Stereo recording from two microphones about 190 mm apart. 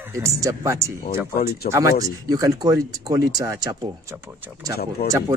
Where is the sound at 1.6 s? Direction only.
45° left (ahead or behind).